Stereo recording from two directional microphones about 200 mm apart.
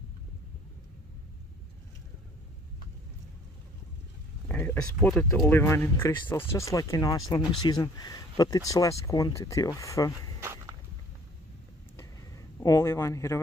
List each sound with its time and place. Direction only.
4.5 s speech: 10° left (ahead or behind)
10.4 s walk: 15° right (ahead or behind)
12.0 s a sound: 15° left (ahead or behind)